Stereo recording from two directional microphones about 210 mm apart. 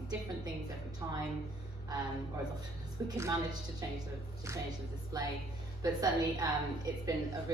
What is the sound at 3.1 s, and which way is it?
Speech, 15° right (ahead or behind).